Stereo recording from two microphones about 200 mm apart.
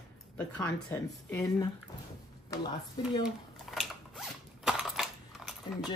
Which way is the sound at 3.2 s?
Centre (ahead or behind).